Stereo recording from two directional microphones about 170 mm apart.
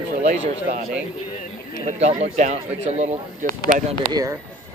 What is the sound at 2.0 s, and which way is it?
Speech, 45° right (ahead or behind).